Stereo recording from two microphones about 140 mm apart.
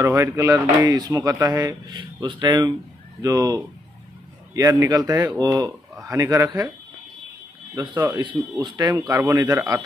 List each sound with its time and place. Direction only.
0.0 s speech: 20° right (ahead or behind)
7.7 s speech: 30° right (ahead or behind)